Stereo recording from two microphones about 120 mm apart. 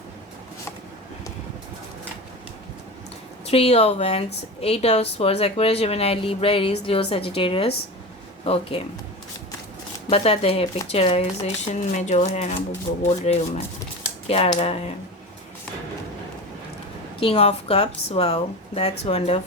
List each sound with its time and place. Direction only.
3.4 s speech: 55° left (ahead or behind)
10.1 s speech: 50° left (ahead or behind); by 13.3 s 65° left (ahead or behind)
14.3 s speech: 55° left (ahead or behind)
17.2 s speech: 55° left (ahead or behind)